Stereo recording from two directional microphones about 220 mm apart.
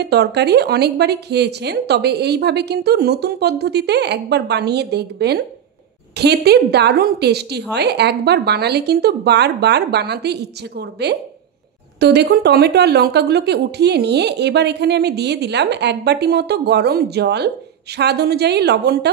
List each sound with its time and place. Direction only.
0.0 s speech: 50° right (ahead or behind)